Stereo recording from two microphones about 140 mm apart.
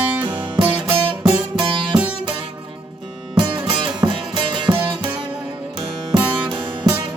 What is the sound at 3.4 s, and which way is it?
Music, 35° right (ahead or behind).